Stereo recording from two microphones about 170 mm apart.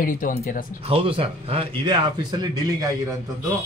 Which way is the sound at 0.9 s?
35° right (ahead or behind).